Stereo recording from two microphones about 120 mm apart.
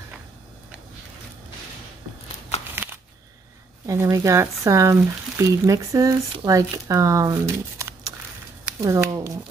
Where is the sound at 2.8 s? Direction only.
15° right (ahead or behind).